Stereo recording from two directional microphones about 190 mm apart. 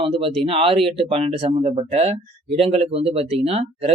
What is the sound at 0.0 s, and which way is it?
Speech, 30° right (ahead or behind).